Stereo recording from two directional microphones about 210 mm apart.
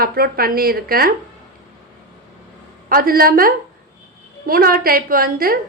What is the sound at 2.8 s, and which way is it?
A woman's voice, 45° right (ahead or behind).